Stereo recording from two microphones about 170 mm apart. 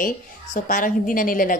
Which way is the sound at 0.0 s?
50° left (ahead or behind).